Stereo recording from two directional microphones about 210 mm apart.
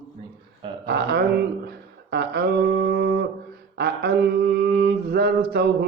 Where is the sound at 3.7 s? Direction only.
50° right (ahead or behind).